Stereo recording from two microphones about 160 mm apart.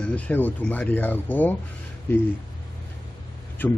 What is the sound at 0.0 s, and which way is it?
Speech, 10° left (ahead or behind).